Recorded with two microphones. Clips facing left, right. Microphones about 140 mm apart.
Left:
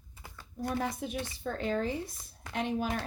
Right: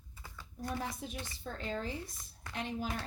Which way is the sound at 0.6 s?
65° left (ahead or behind).